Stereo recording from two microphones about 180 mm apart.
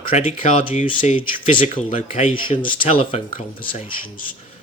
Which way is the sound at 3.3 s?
50° left (ahead or behind).